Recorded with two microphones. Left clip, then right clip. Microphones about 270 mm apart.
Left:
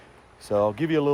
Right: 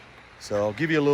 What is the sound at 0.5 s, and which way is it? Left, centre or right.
Speech, left.